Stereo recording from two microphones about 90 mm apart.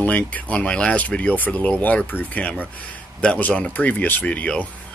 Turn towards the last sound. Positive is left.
turn(degrees=15)  # may be behind; listen again after turning